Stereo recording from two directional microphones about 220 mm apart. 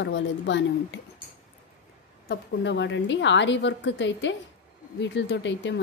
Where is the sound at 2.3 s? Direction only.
55° left (ahead or behind).